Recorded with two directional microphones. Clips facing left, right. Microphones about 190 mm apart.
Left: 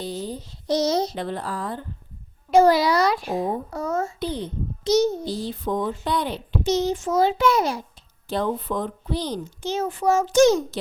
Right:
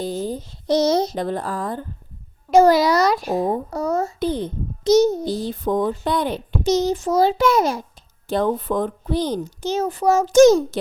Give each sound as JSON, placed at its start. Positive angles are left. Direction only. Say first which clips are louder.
{"t": 0.0, "sound": "a child's voice", "louder": "right 5 dB", "side_deg": -45}
{"t": 4.2, "sound": "a child's voice", "louder": "right 5 dB", "side_deg": -50}